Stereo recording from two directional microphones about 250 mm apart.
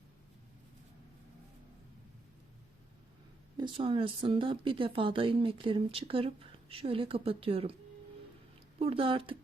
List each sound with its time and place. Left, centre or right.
3.6 s speech: right
8.8 s speech: right